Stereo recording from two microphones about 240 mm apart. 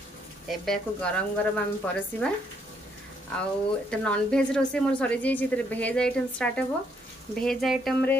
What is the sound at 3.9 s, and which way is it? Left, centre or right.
A woman's voice, centre.